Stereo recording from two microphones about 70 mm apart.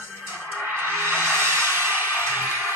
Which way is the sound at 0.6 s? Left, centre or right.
Right.